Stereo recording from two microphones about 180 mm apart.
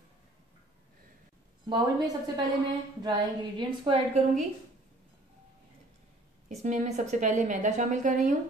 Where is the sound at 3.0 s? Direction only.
25° right (ahead or behind).